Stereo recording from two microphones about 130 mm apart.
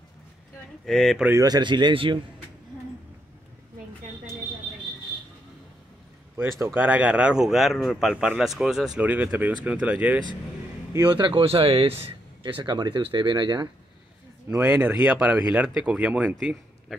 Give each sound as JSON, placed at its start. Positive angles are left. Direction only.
{"t": 0.8, "sound": "speech", "side_deg": 0}
{"t": 1.4, "sound": "speech", "side_deg": -35}
{"t": 6.3, "sound": "speech", "side_deg": -20}
{"t": 11.1, "sound": "speech", "side_deg": -35}
{"t": 14.6, "sound": "speech", "side_deg": -15}